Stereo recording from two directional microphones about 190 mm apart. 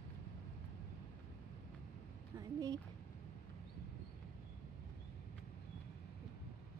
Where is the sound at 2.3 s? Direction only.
20° right (ahead or behind).